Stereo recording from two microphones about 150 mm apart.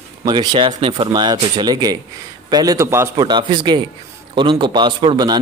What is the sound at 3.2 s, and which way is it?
A man's voice, 30° right (ahead or behind).